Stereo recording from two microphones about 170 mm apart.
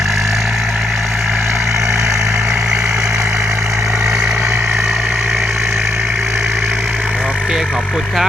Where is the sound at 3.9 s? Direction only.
5° right (ahead or behind).